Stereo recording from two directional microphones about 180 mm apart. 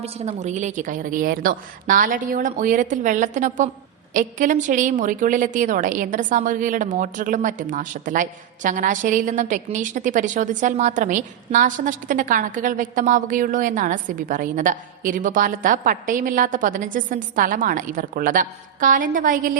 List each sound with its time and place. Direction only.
0.0 s a woman's voice: 40° right (ahead or behind)